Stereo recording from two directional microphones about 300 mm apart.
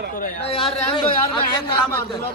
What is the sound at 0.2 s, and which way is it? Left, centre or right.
Speech, centre.